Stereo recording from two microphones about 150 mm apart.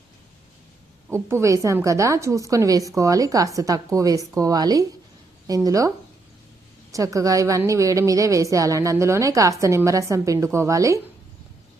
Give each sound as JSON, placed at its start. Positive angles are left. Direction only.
{"t": 1.1, "sound": "a woman's voice", "side_deg": -20}
{"t": 6.9, "sound": "a woman's voice", "side_deg": -20}